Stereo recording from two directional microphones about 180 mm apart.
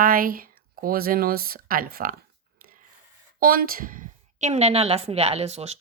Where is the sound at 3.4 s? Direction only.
55° right (ahead or behind).